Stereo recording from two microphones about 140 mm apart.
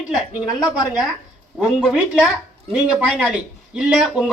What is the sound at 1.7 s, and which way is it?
Speech, 5° right (ahead or behind).